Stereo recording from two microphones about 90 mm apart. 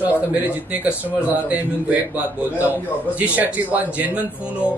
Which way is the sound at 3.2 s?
15° right (ahead or behind).